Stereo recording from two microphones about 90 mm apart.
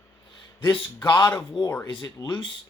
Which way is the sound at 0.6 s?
60° left (ahead or behind).